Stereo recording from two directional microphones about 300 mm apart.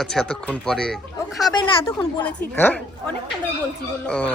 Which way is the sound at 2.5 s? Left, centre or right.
Centre.